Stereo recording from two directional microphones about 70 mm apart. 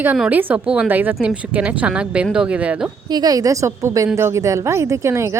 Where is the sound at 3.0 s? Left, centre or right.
Right.